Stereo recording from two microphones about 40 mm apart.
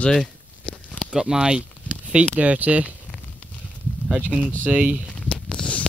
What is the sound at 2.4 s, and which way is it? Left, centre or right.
Speech, right.